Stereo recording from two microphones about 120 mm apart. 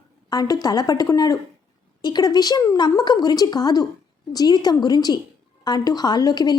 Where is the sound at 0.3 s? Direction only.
30° left (ahead or behind).